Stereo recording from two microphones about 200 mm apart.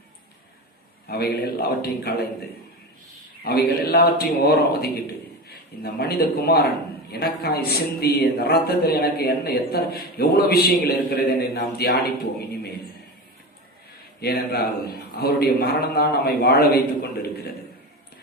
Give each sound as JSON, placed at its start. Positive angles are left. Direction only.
{"t": 1.0, "sound": "a man's voice", "side_deg": 50}
{"t": 3.4, "sound": "a man's voice", "side_deg": 50}
{"t": 14.2, "sound": "a man's voice", "side_deg": 50}